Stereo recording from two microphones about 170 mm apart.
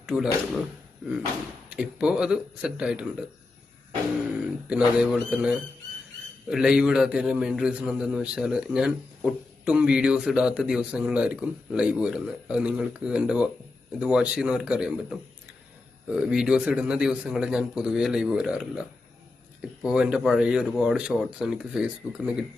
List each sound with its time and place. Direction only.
0.0 s a man's voice: 5° right (ahead or behind)
1.7 s a man's voice: 5° right (ahead or behind)
4.7 s a man's voice: 5° right (ahead or behind)